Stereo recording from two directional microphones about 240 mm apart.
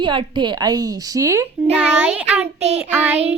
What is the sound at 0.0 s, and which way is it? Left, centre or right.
A woman's voice, centre.